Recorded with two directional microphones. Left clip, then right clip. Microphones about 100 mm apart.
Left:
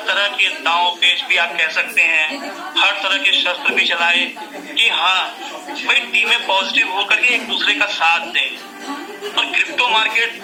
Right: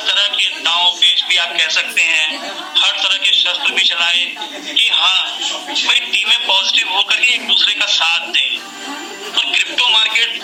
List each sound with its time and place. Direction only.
0.0 s a man's voice: 20° right (ahead or behind)